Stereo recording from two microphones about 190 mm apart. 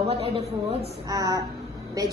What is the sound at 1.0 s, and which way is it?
A woman's voice, 20° right (ahead or behind).